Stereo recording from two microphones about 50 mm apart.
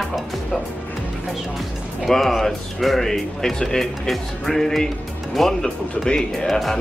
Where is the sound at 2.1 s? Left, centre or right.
Centre.